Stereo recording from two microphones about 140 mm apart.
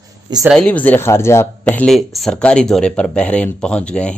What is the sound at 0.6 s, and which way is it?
Speech, 10° left (ahead or behind).